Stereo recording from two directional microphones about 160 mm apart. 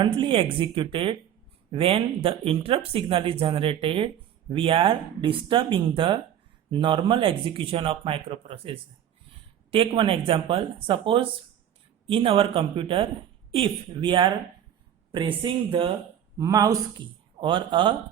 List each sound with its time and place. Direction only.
0.0 s speech: 30° right (ahead or behind)
16.4 s speech: 20° right (ahead or behind)